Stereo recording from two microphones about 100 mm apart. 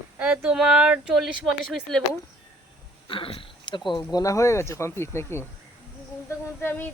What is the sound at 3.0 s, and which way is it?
Speech, 60° left (ahead or behind).